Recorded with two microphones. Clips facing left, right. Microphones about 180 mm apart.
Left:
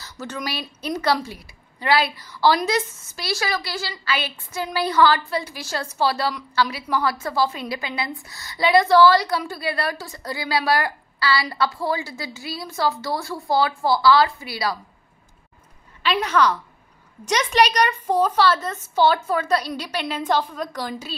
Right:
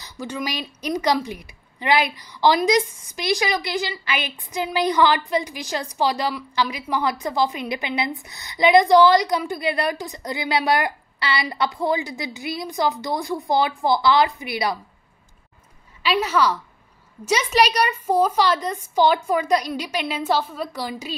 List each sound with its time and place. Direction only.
0.0 s a woman's voice: 10° right (ahead or behind)
16.0 s a woman's voice: 10° right (ahead or behind)